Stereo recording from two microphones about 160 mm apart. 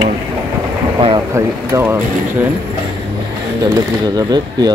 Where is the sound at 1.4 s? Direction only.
15° right (ahead or behind).